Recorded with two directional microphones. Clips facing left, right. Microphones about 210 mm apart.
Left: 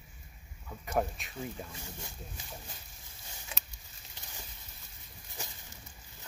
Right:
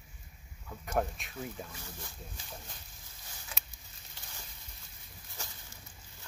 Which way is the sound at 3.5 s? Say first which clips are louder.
Left 1 dB; 25° left (ahead or behind).